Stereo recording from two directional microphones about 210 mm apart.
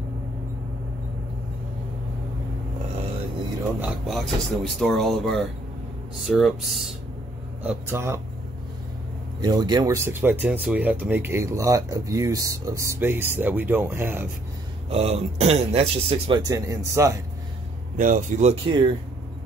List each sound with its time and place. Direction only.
3.8 s speech: centre (ahead or behind)
9.4 s speech: 20° right (ahead or behind)
14.9 s a man's voice: 30° right (ahead or behind)
17.9 s speech: 40° right (ahead or behind)